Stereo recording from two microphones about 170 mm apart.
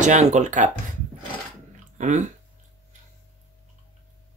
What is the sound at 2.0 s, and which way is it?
Speech, 45° right (ahead or behind).